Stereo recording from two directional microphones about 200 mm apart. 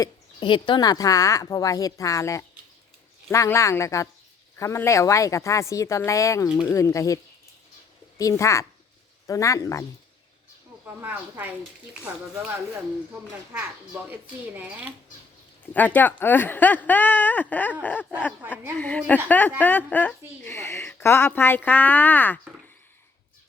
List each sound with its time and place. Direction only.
0.0 s speech: 25° left (ahead or behind)
8.2 s speech: 15° left (ahead or behind)
10.8 s a child's voice: 10° right (ahead or behind)
15.7 s speech: 10° left (ahead or behind)
18.8 s speech: 5° left (ahead or behind)